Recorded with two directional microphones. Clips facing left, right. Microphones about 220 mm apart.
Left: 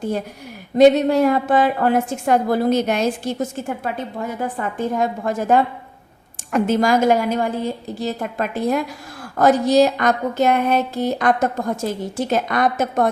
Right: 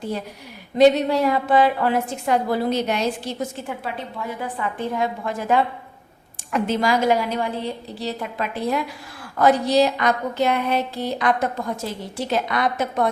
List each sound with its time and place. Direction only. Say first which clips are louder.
0.8 s a woman's voice: left 3 dB; 50° left (ahead or behind)